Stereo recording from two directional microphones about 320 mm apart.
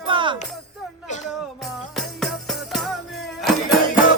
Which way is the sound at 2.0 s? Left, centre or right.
Centre.